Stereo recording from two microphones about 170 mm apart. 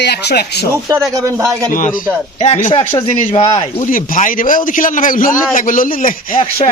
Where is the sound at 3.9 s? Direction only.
50° left (ahead or behind).